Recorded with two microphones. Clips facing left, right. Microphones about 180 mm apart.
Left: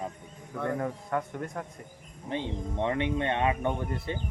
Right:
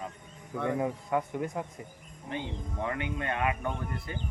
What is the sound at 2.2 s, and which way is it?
Speech, 30° left (ahead or behind).